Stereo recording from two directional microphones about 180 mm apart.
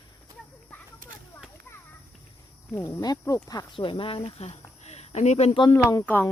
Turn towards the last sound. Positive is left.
turn(degrees=10)  # may be behind; listen again after turning